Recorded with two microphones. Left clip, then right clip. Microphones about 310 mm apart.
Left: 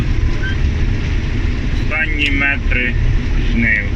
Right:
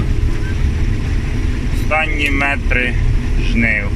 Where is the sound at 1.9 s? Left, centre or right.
Centre.